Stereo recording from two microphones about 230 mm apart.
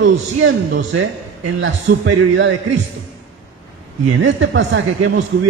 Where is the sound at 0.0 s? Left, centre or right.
Right.